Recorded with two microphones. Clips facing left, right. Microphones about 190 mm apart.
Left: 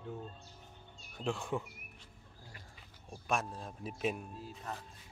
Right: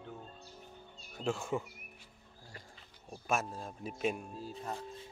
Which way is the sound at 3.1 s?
Centre (ahead or behind).